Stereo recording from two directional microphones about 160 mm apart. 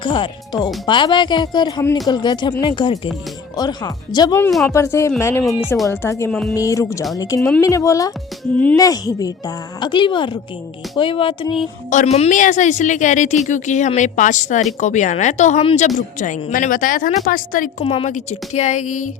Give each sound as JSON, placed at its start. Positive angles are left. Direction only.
{"t": 0.0, "sound": "a woman's voice", "side_deg": 30}
{"t": 5.4, "sound": "speech", "side_deg": 0}
{"t": 5.9, "sound": "a woman's voice", "side_deg": 15}
{"t": 11.9, "sound": "a woman's voice", "side_deg": 50}
{"t": 17.8, "sound": "speech", "side_deg": 35}
{"t": 18.1, "sound": "a woman's voice", "side_deg": 45}